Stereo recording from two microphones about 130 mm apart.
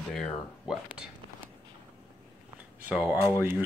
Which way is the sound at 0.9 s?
10° right (ahead or behind).